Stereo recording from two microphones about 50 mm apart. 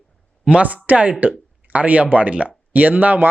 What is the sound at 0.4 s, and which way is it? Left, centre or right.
Speech, right.